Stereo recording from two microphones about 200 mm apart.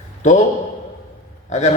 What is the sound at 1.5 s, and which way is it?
Speech, 35° left (ahead or behind).